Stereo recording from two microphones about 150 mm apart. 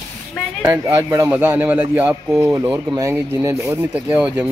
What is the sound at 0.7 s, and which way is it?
Speech, 20° right (ahead or behind).